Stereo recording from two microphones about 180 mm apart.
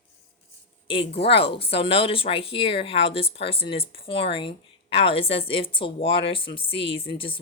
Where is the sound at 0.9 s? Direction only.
30° left (ahead or behind).